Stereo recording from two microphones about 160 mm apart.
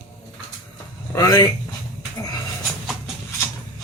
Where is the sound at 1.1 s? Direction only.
20° left (ahead or behind).